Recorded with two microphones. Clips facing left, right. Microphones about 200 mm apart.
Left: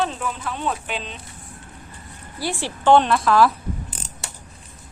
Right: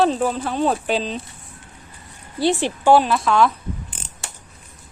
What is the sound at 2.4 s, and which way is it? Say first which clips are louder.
Speech: right 7 dB; 20° right (ahead or behind).